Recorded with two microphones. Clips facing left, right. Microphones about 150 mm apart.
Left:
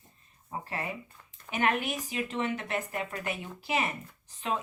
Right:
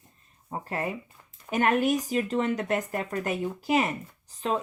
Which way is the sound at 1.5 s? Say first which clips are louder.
Right 6 dB; 45° right (ahead or behind).